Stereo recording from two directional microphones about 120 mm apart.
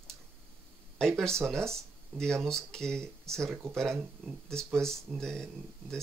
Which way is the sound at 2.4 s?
5° left (ahead or behind).